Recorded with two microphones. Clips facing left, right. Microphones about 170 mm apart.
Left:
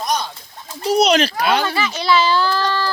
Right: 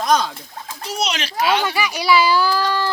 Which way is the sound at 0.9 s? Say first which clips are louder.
Left 10 dB; 40° left (ahead or behind).